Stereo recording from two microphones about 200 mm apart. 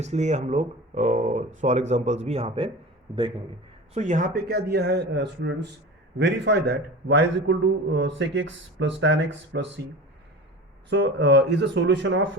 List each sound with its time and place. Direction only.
0.0 s speech: 35° right (ahead or behind)
3.9 s a man's voice: 35° right (ahead or behind); by 9.8 s 60° right (ahead or behind)
10.8 s a man's voice: 60° right (ahead or behind)